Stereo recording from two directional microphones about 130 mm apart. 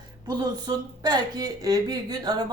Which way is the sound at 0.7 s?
25° right (ahead or behind).